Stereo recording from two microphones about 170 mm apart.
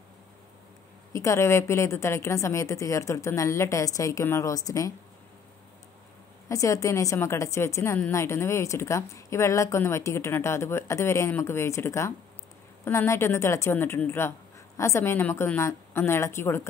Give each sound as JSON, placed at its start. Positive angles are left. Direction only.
{"t": 1.1, "sound": "a woman's voice", "side_deg": 20}
{"t": 6.5, "sound": "a woman's voice", "side_deg": 20}